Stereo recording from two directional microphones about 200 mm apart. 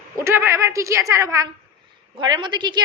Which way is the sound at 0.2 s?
15° right (ahead or behind).